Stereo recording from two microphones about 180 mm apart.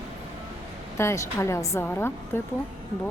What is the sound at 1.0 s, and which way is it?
Speech, 15° left (ahead or behind).